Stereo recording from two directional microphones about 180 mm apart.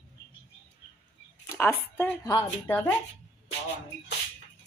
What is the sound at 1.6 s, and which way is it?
Speech, 10° left (ahead or behind).